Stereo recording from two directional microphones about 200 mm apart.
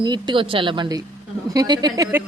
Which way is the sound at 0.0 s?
20° right (ahead or behind).